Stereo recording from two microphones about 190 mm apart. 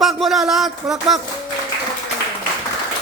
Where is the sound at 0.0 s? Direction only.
Centre (ahead or behind).